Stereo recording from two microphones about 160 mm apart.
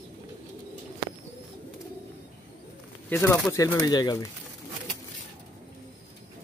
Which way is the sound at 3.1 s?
15° left (ahead or behind).